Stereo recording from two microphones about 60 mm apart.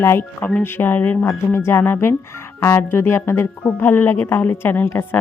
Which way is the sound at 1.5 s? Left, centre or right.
Left.